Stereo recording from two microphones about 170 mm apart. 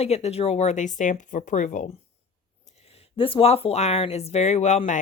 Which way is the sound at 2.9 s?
30° left (ahead or behind).